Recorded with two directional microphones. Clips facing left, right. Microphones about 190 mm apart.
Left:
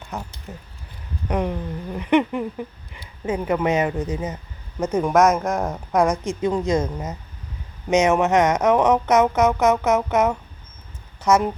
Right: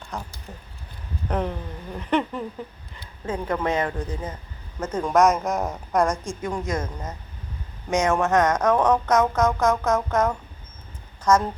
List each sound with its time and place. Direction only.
0.1 s speech: 5° left (ahead or behind)
6.2 s a woman's voice: 25° left (ahead or behind)
6.8 s a woman's voice: 10° left (ahead or behind)